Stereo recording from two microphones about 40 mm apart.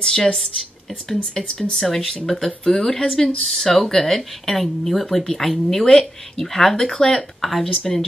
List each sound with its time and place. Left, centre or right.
0.0 s speech: centre
7.4 s speech: centre
7.8 s speech: centre